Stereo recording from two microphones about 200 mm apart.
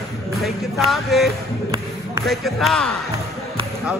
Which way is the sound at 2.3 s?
Centre (ahead or behind).